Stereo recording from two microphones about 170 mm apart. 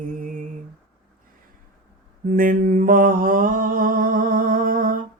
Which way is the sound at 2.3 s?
55° right (ahead or behind).